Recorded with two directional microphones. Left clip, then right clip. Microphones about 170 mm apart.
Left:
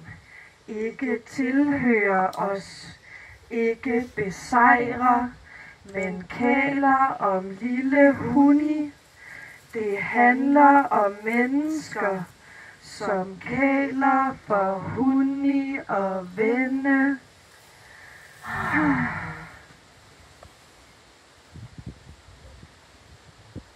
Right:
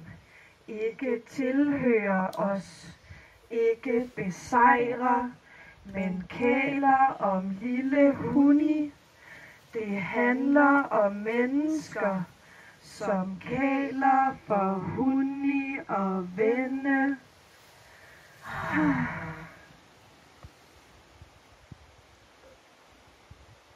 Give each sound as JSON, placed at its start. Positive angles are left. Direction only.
{"t": 1.0, "sound": "speech", "side_deg": 20}
{"t": 3.8, "sound": "female singing", "side_deg": 15}
{"t": 9.9, "sound": "female singing", "side_deg": 15}
{"t": 15.7, "sound": "speech", "side_deg": 20}
{"t": 18.5, "sound": "a sound", "side_deg": 20}